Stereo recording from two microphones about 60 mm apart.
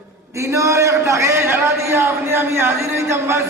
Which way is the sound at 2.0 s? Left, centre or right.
Right.